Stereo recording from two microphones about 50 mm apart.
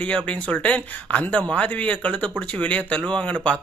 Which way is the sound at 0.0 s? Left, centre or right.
Left.